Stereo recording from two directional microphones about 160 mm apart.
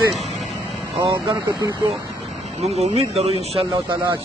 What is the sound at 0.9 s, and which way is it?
Speech, 20° right (ahead or behind).